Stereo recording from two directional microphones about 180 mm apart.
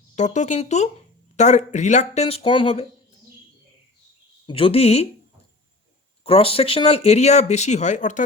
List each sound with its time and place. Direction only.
0.2 s speech: 40° left (ahead or behind)
4.4 s speech: 30° left (ahead or behind)
6.2 s speech: 30° left (ahead or behind)